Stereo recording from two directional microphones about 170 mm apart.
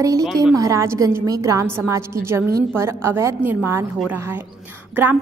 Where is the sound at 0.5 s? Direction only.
20° right (ahead or behind).